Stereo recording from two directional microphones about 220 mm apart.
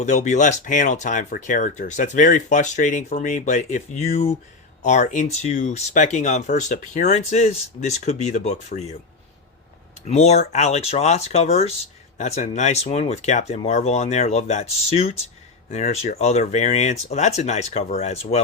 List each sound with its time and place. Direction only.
0.0 s speech: 35° left (ahead or behind)
10.1 s speech: 30° left (ahead or behind)